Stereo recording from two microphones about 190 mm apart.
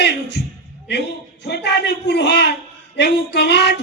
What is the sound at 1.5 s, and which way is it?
A man's voice, 65° left (ahead or behind).